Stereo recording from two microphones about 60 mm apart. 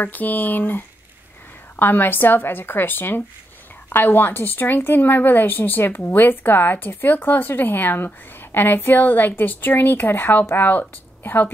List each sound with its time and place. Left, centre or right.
0.0 s speech: left